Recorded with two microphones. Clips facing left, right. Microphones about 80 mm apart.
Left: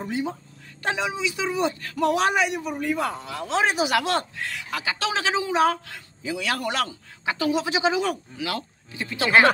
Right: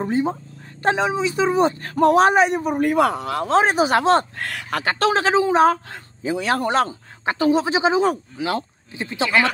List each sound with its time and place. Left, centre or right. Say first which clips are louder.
0.0 s speech: right 7 dB; right
3.4 s speech: right 5 dB; right
4.4 s speech: right 5 dB; right